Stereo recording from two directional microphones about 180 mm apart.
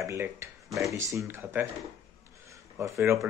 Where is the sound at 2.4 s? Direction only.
15° right (ahead or behind).